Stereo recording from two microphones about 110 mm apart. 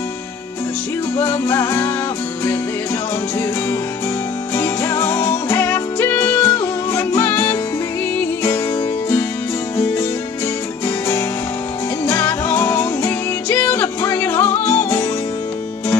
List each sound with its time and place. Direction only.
1.1 s music: 20° left (ahead or behind)
4.6 s music: 25° left (ahead or behind)
12.1 s music: 20° left (ahead or behind)